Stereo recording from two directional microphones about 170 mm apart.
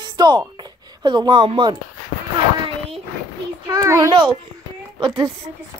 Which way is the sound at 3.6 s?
20° right (ahead or behind).